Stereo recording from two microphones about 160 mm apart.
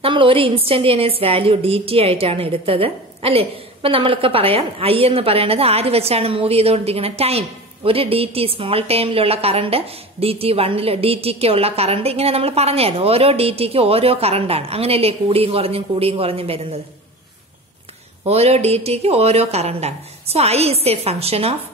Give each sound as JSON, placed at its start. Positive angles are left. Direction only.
{"t": 0.0, "sound": "a woman's voice", "side_deg": -35}
{"t": 18.2, "sound": "a woman's voice", "side_deg": -40}